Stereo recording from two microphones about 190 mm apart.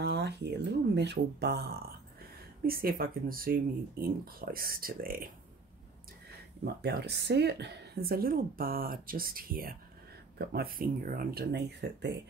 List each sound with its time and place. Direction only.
0.0 s a woman's voice: 60° right (ahead or behind)
6.6 s a woman's voice: 60° right (ahead or behind)